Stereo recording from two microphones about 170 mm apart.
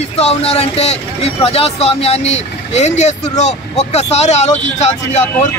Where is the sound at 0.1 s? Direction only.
35° left (ahead or behind).